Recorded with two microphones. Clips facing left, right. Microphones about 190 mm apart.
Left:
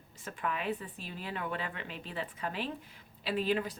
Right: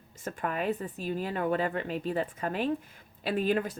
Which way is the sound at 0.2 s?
45° right (ahead or behind).